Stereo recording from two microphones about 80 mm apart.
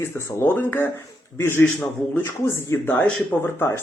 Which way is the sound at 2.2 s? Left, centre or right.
Left.